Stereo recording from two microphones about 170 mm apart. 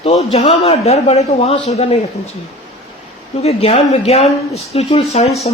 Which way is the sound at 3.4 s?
35° left (ahead or behind).